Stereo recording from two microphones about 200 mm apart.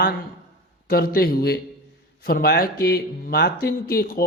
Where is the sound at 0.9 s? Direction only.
50° left (ahead or behind).